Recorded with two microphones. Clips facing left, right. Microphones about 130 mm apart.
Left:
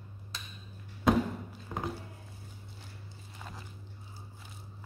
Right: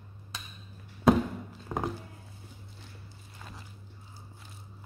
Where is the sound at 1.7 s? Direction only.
50° right (ahead or behind).